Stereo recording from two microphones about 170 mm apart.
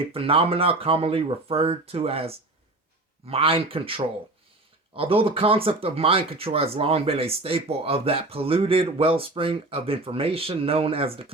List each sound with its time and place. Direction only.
0.1 s speech: 35° right (ahead or behind)